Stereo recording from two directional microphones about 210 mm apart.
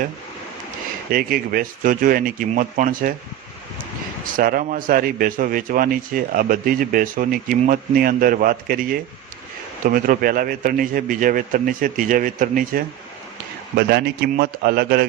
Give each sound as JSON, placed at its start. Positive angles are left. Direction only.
{"t": 1.1, "sound": "a man's voice", "side_deg": -45}
{"t": 4.4, "sound": "a man's voice", "side_deg": -40}